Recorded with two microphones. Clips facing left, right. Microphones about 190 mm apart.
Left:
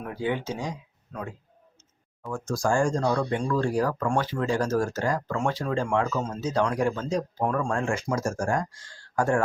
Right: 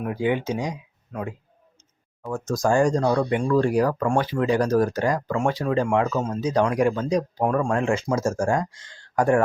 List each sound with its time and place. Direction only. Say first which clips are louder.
0.0 s speech: right 5 dB; 15° right (ahead or behind)